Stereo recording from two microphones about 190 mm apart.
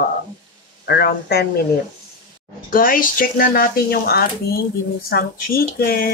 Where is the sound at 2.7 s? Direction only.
45° left (ahead or behind).